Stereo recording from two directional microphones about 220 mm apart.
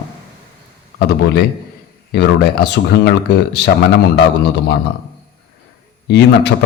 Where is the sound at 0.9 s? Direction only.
50° left (ahead or behind).